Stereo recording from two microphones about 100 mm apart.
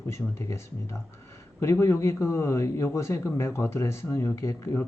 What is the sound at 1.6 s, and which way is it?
Speech, 30° left (ahead or behind).